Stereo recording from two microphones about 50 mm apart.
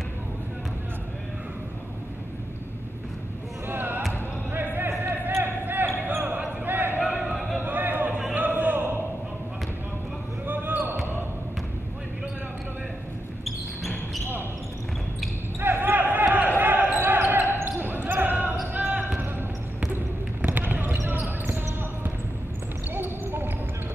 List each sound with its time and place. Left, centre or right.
3.6 s basketball bounce: right
4.5 s a sound: right
5.3 s basketball bounce: right
6.6 s a sound: right
7.1 s a sound: centre
7.3 s music: centre
7.6 s music: right
10.4 s basketball bounce: right
15.6 s basketball bounce: right
20.4 s basketball bounce: right
22.9 s basketball bounce: right